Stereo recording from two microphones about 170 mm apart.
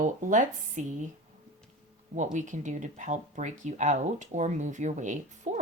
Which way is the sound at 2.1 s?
45° right (ahead or behind).